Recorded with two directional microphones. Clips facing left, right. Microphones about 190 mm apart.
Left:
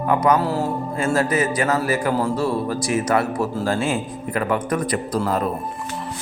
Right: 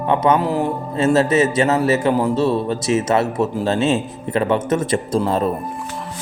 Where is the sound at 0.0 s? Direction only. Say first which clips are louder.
Right 2 dB; 25° right (ahead or behind).